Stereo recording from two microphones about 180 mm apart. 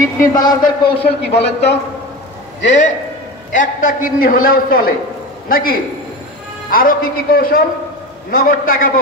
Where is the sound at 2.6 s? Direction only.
40° left (ahead or behind).